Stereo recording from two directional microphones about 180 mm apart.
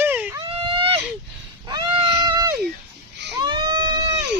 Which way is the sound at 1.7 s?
25° right (ahead or behind).